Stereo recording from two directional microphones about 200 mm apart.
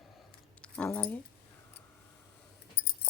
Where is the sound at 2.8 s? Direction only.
55° left (ahead or behind).